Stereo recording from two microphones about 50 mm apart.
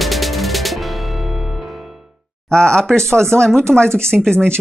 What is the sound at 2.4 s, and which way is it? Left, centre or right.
Speech, centre.